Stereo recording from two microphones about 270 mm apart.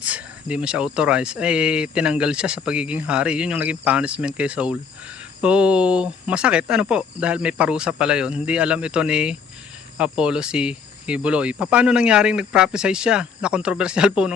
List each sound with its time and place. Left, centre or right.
0.0 s speech: centre